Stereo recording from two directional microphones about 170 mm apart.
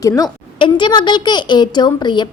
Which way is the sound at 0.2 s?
25° left (ahead or behind).